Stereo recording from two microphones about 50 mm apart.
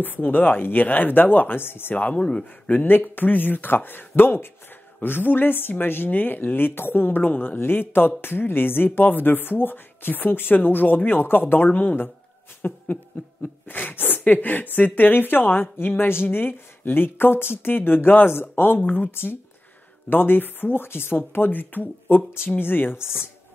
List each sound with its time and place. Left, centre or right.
0.0 s speech: left
2.1 s speech: left
2.8 s speech: left
7.5 s speech: left